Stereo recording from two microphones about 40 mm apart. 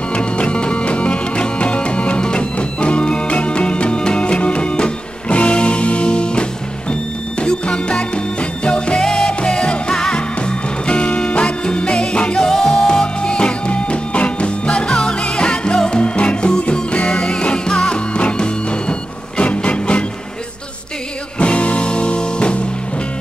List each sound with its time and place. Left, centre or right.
0.1 s music: left
12.4 s music: centre; by 20.1 s left
21.4 s music: left